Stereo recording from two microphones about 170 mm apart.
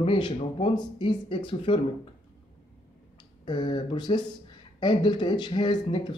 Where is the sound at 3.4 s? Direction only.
30° left (ahead or behind).